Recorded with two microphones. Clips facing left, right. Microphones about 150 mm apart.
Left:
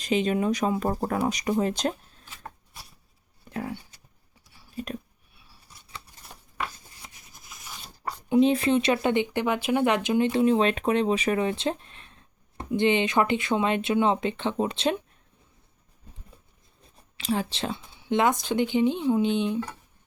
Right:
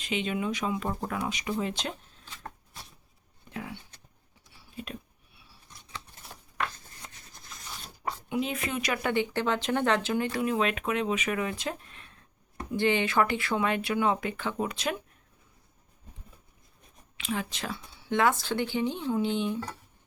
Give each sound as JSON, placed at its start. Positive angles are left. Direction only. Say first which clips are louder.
{"t": 0.0, "sound": "speech", "louder": "left 6 dB", "side_deg": 40}
{"t": 3.5, "sound": "a sound", "louder": "left 6 dB", "side_deg": 40}
{"t": 5.6, "sound": "scissors", "louder": "right 1 dB", "side_deg": 5}
{"t": 8.3, "sound": "speech", "louder": "left 12 dB", "side_deg": 30}
{"t": 17.2, "sound": "speech", "louder": "left 5 dB", "side_deg": 35}